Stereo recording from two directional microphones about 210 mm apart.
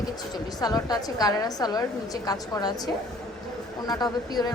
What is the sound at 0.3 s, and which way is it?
A woman's voice, 20° left (ahead or behind).